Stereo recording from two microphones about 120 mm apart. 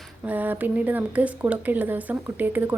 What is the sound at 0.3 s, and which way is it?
Speech, 15° right (ahead or behind).